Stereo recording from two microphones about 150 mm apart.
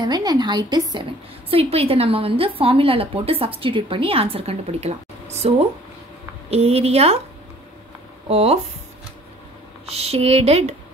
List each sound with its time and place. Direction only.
0.0 s speech: 25° right (ahead or behind)
1.5 s a woman's voice: 40° right (ahead or behind)
6.5 s speech: 45° right (ahead or behind)
8.3 s speech: 45° right (ahead or behind)
9.8 s speech: 45° right (ahead or behind)